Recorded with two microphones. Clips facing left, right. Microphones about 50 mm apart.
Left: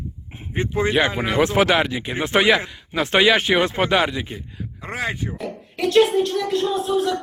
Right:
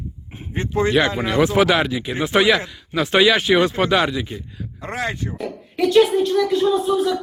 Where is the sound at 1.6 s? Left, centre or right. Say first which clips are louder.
Right 1 dB; left; by 5.3 s centre.